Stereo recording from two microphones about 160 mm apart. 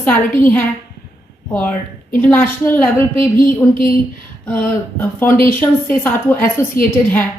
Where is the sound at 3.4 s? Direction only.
60° left (ahead or behind).